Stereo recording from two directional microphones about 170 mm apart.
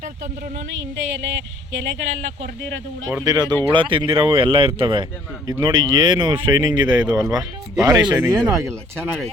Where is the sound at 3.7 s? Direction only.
30° right (ahead or behind).